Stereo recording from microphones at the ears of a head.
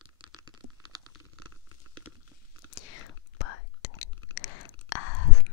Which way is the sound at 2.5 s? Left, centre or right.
Left.